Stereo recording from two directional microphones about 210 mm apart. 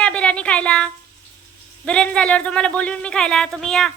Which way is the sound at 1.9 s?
5° left (ahead or behind).